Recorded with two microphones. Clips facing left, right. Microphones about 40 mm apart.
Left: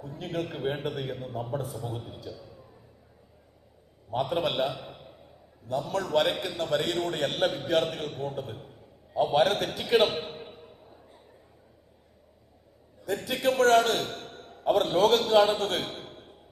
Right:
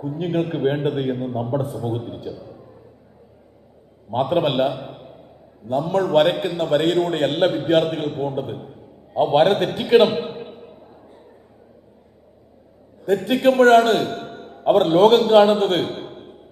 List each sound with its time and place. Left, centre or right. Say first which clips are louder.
0.0 s a man's voice: right 10 dB; right
1.7 s a man's voice: right 10 dB; right
4.1 s a man's voice: right 8 dB; right
4.7 s a sound: right 8 dB; right
5.6 s a man's voice: right 9 dB; right
10.2 s a sound: right 9 dB; right
13.2 s a man's voice: right 9 dB; right
14.1 s a sound: right 10 dB; right
14.7 s a man's voice: right 9 dB; right